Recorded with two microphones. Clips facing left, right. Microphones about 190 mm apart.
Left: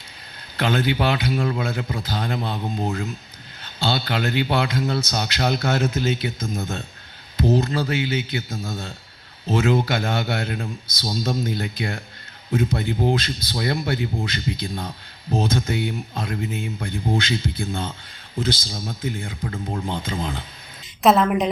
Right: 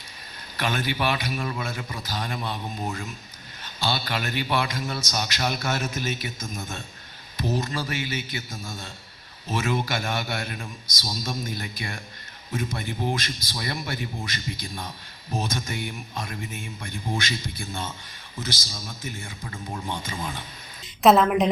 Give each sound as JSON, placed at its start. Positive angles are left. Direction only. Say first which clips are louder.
{"t": 0.5, "sound": "a man's voice", "louder": "left 6 dB", "side_deg": 55}
{"t": 2.6, "sound": "speech", "louder": "left 6 dB", "side_deg": 20}
{"t": 3.6, "sound": "a man's voice", "louder": "left 4 dB", "side_deg": 60}
{"t": 21.0, "sound": "a woman's voice", "louder": "even", "side_deg": 0}